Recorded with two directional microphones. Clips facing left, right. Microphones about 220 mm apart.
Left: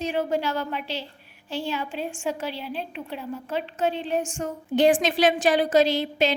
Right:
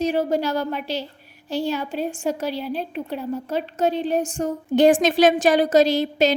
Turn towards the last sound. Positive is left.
turn(degrees=-40)  # may be behind; listen again after turning